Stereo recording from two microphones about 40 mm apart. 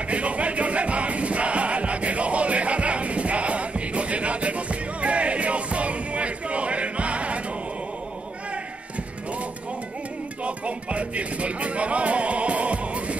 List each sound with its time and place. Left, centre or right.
0.1 s music: right
10.4 s music: right